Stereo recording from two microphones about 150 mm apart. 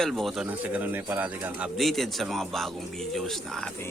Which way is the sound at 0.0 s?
Centre (ahead or behind).